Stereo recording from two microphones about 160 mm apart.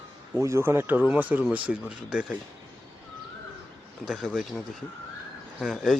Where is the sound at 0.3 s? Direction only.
20° right (ahead or behind).